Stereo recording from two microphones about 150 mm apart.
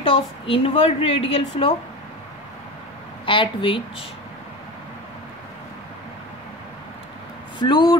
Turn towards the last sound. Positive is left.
turn(degrees=30)  # may be behind; listen again after turning